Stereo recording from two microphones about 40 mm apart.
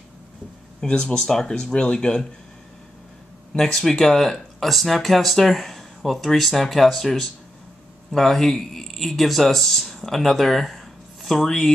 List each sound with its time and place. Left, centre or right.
0.8 s speech: left
4.0 s speech: centre